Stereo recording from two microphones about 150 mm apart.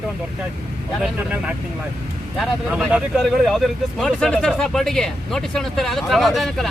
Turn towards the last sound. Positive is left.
turn(degrees=0)  # may be behind; listen again after turning